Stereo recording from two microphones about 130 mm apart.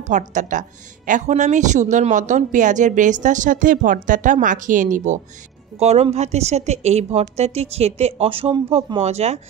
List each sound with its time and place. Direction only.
0.0 s speech: 70° right (ahead or behind)
5.8 s a woman's voice: 55° right (ahead or behind)